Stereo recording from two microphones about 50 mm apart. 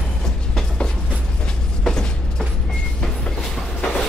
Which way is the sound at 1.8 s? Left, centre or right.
Centre.